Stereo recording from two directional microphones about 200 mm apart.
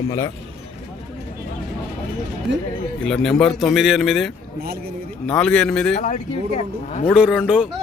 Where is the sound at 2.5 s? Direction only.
60° right (ahead or behind).